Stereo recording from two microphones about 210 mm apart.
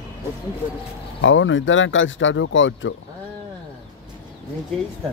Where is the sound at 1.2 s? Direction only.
65° left (ahead or behind).